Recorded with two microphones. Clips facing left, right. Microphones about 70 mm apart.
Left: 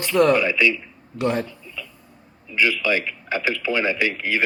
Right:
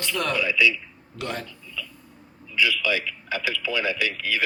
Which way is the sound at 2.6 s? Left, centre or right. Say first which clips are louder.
Left 3 dB; left.